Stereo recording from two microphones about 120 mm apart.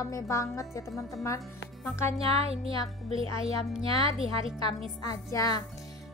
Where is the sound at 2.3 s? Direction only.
55° right (ahead or behind).